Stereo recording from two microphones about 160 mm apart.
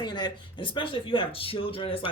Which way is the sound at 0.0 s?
25° left (ahead or behind).